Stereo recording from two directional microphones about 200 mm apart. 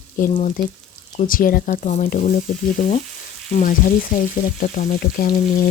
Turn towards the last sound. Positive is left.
turn(degrees=50)  # may be behind; listen again after turning